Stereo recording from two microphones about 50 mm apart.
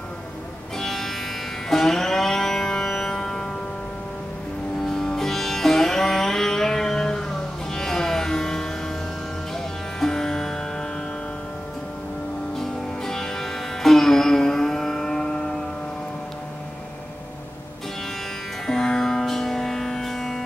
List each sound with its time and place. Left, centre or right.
0.7 s music: centre
4.8 s music: centre
9.9 s music: centre
12.5 s music: centre
18.7 s music: centre